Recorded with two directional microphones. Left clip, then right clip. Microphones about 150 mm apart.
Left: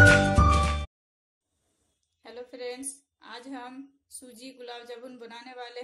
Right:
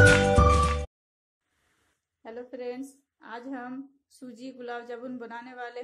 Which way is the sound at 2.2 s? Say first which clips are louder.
Right 1 dB; 45° right (ahead or behind).